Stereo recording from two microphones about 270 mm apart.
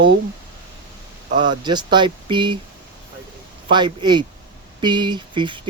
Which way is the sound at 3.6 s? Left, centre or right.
Centre.